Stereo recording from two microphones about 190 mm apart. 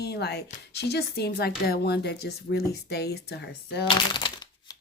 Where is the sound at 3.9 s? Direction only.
25° left (ahead or behind).